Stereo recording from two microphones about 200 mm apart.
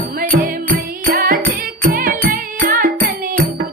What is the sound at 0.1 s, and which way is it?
Music, 45° right (ahead or behind).